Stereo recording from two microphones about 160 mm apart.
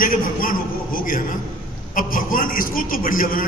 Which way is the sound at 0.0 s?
60° left (ahead or behind).